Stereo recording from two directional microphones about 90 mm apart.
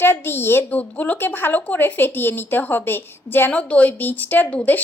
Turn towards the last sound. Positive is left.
turn(degrees=20)  # may be behind; listen again after turning